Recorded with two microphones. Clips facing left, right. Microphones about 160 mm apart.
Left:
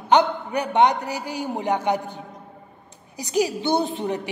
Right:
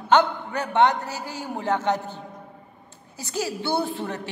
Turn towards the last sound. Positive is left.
turn(degrees=15)  # may be behind; listen again after turning